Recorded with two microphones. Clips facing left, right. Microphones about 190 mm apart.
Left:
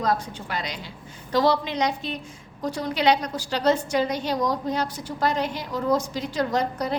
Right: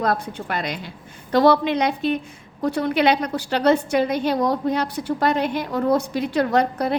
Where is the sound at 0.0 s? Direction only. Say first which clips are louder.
Right 2 dB; 60° right (ahead or behind).